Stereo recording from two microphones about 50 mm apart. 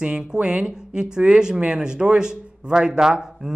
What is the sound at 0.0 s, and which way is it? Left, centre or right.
Speech, centre.